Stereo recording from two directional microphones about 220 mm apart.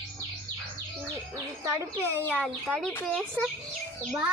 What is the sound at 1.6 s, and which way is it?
Speech, 10° right (ahead or behind).